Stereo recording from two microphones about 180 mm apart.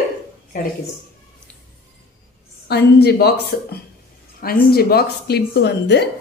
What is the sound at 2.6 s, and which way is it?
A woman's voice, 65° left (ahead or behind).